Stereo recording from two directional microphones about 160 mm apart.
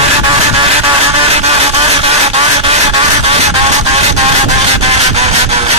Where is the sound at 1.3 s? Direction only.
40° right (ahead or behind).